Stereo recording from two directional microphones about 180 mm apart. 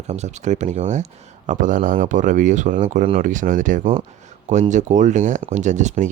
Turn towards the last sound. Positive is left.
turn(degrees=-40)  # may be behind; listen again after turning